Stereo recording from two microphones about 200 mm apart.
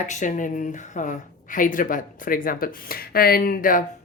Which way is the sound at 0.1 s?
40° left (ahead or behind).